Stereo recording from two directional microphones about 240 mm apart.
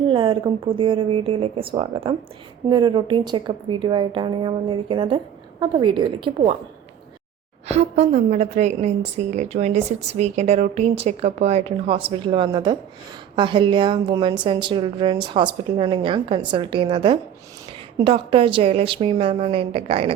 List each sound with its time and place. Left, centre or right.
0.1 s a woman's voice: centre
7.7 s a woman's voice: right